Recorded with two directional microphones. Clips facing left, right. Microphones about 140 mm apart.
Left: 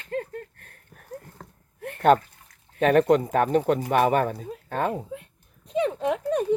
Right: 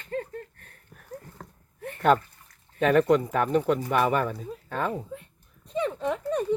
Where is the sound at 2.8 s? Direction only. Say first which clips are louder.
Left 2 dB; 65° left (ahead or behind).